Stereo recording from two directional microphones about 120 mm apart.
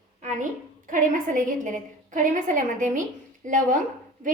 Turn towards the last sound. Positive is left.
turn(degrees=-90)